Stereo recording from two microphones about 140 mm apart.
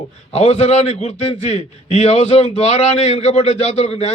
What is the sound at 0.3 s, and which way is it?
A man's voice, 55° left (ahead or behind).